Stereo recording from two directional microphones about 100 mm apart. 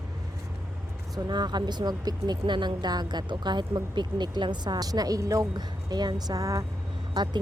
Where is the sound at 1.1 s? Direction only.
45° right (ahead or behind).